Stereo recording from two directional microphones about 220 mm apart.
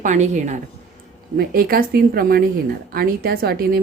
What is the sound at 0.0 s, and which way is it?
A woman's voice, 35° right (ahead or behind).